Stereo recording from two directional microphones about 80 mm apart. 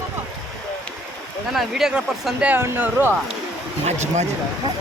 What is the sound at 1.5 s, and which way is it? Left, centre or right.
Speech, centre.